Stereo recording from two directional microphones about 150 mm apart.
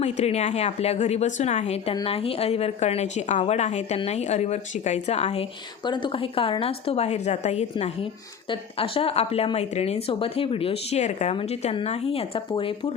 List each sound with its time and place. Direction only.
0.0 s a woman's voice: 45° left (ahead or behind)
5.8 s a woman's voice: 30° left (ahead or behind)